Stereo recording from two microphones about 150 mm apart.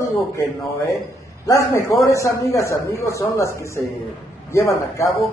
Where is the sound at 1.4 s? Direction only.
20° left (ahead or behind).